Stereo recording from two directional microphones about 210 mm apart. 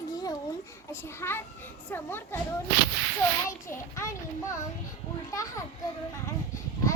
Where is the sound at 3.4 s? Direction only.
15° left (ahead or behind).